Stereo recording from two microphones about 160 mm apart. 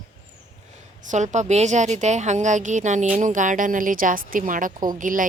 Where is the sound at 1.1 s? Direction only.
50° right (ahead or behind).